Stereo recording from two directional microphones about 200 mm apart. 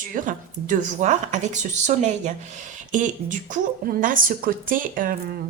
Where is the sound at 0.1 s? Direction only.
40° right (ahead or behind).